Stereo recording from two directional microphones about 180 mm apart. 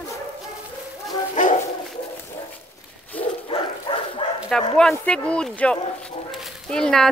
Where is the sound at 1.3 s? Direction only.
45° left (ahead or behind).